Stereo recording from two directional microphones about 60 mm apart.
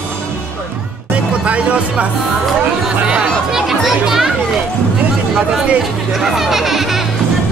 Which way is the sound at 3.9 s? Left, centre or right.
Centre.